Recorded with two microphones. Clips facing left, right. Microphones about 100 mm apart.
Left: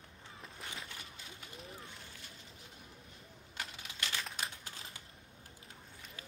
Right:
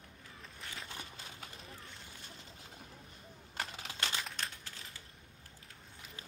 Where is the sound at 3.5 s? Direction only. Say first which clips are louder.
Right 4 dB; 35° right (ahead or behind).